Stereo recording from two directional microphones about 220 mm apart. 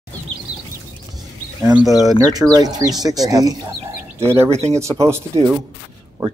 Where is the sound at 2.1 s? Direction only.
15° right (ahead or behind).